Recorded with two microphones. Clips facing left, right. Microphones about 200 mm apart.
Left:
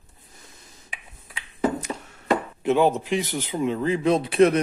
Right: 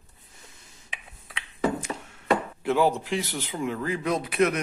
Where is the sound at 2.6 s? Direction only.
20° left (ahead or behind).